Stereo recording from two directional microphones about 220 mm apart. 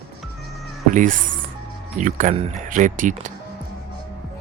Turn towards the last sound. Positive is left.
turn(degrees=-35)  # may be behind; listen again after turning